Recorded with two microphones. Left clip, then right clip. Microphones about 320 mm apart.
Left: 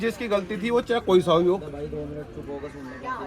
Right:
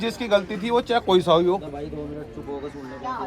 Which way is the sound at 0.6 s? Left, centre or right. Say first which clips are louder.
Right 2 dB; right.